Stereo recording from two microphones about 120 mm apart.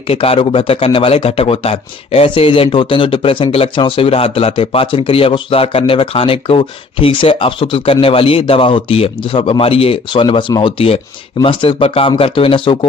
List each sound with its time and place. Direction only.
0.1 s speech: 55° left (ahead or behind)